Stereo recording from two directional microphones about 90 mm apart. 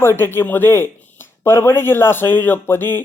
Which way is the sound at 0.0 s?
25° left (ahead or behind).